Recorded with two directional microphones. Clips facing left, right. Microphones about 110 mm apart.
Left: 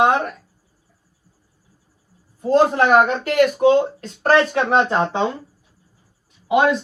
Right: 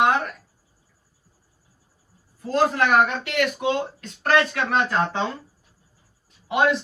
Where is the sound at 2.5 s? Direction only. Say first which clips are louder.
Left 5 dB; 30° left (ahead or behind).